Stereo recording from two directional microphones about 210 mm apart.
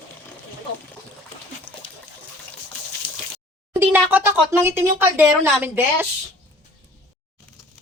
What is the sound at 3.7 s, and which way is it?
Speech, 10° right (ahead or behind).